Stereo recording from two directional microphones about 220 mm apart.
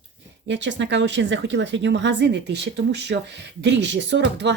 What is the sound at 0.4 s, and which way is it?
Speech, 55° right (ahead or behind).